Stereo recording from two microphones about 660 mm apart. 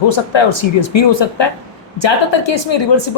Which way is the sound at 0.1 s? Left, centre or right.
Left.